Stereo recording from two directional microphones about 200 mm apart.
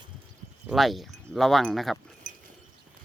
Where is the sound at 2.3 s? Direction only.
40° right (ahead or behind).